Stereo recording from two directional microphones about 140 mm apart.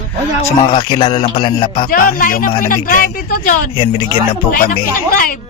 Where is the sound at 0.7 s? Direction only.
40° left (ahead or behind).